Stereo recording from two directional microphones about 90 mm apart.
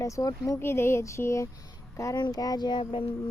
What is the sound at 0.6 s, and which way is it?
Speech, 25° left (ahead or behind).